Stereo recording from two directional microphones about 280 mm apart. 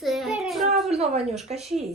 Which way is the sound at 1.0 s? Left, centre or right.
Right.